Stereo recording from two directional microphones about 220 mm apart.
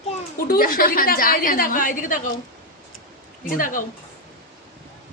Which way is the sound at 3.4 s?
40° left (ahead or behind).